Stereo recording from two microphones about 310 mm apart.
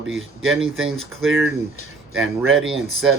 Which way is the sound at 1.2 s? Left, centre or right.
Right.